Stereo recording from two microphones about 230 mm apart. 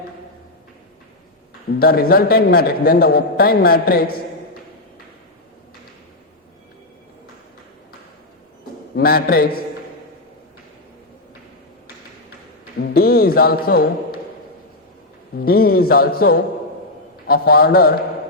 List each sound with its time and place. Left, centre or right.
1.8 s a man's voice: left
9.0 s a man's voice: left
12.8 s a man's voice: left
15.4 s a man's voice: left